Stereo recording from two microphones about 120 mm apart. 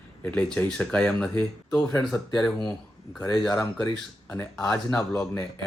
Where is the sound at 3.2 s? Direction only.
35° left (ahead or behind).